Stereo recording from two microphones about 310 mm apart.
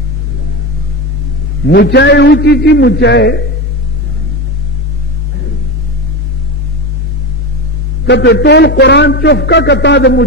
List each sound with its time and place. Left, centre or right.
1.7 s a man's voice: left
8.0 s a man's voice: left